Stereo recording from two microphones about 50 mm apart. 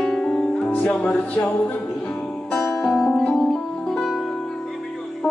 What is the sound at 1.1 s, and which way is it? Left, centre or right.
Music, left.